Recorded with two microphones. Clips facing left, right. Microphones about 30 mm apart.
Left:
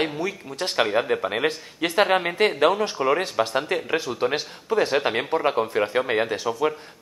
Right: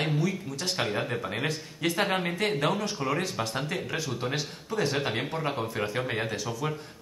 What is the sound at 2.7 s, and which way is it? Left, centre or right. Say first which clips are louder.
Speech: left 7 dB; left.